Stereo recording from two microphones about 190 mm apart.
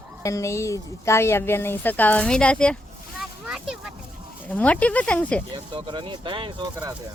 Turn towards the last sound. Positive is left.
turn(degrees=-20)  # may be behind; listen again after turning